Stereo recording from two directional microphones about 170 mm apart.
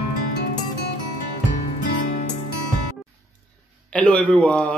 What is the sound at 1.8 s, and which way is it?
Music, 50° left (ahead or behind).